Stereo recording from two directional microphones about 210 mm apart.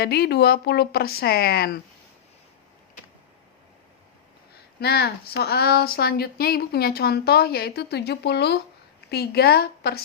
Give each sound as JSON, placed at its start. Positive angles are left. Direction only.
{"t": 0.0, "sound": "speech", "side_deg": 50}
{"t": 4.5, "sound": "speech", "side_deg": 50}